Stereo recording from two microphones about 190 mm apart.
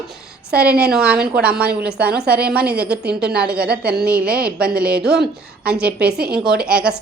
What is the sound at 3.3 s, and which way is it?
A woman's voice, 5° right (ahead or behind).